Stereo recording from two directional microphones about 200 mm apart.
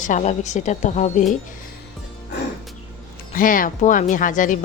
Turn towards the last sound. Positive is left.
turn(degrees=40)  # may be behind; listen again after turning